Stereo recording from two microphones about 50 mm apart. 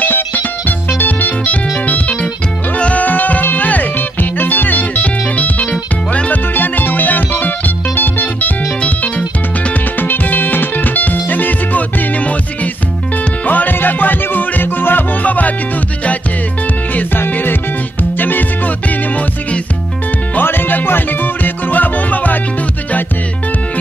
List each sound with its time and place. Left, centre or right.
0.0 s music: left
6.5 s music: left
13.5 s music: left
15.2 s music: left
16.9 s music: left
20.3 s music: left